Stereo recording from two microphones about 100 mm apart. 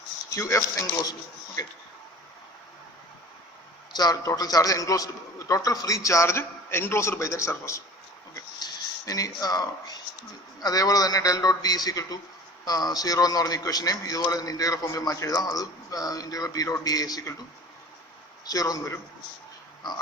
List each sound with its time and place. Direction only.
0.3 s a man's voice: 30° left (ahead or behind)
1.6 s a man's voice: 40° left (ahead or behind)
3.9 s a man's voice: 40° left (ahead or behind)
8.5 s a man's voice: 40° left (ahead or behind)
18.4 s a man's voice: 35° left (ahead or behind)